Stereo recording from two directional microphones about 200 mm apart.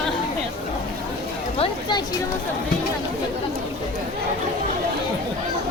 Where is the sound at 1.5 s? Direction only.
25° left (ahead or behind).